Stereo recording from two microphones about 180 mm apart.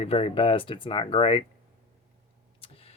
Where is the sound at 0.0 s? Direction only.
35° left (ahead or behind).